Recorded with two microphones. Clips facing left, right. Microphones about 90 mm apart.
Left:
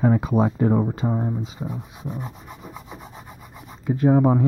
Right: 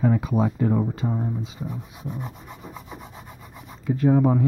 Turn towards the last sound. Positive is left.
turn(degrees=25)  # may be behind; listen again after turning